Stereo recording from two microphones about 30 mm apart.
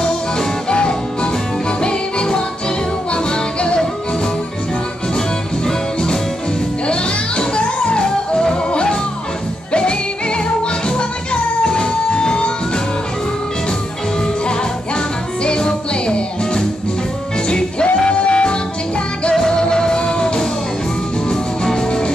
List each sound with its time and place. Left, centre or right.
0.7 s music: left
6.9 s music: left
11.6 s music: left
14.2 s music: left
19.3 s music: left